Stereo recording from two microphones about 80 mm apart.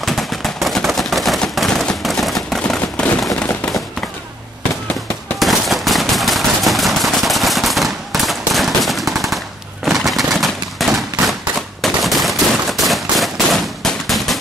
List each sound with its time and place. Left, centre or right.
0.0 s a sound: centre
5.4 s machine gun: centre
9.8 s gunshot: centre